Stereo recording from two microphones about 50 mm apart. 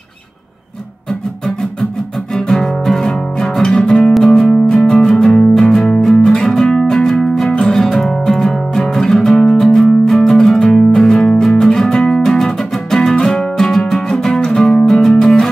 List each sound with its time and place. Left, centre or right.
1.4 s music: centre
3.8 s music: centre